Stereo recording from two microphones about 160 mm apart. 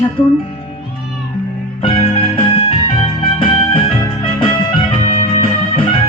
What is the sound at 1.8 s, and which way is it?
Music, 35° left (ahead or behind).